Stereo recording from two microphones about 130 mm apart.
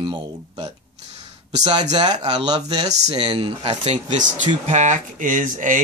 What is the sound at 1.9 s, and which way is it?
Speech, 35° right (ahead or behind).